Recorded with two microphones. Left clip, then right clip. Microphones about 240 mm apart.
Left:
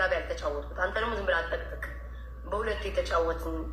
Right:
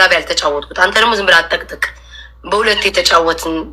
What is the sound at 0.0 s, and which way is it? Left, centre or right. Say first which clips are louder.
Speech: right 18 dB; right.